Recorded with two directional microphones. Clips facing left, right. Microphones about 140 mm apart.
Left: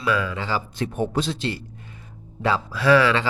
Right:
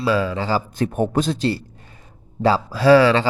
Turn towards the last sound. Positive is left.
turn(degrees=-35)  # may be behind; listen again after turning